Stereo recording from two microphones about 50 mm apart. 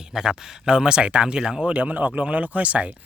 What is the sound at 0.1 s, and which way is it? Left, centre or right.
Speech, centre.